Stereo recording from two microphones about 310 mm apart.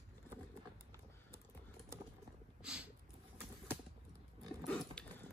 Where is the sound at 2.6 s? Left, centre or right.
Centre.